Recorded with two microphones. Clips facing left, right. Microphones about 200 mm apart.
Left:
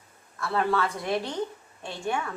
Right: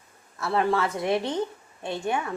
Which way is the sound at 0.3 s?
25° right (ahead or behind).